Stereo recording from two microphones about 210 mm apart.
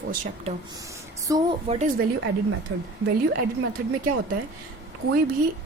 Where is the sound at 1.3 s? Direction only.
15° right (ahead or behind).